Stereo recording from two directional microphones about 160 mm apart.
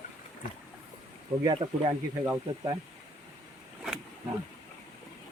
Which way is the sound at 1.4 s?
35° right (ahead or behind).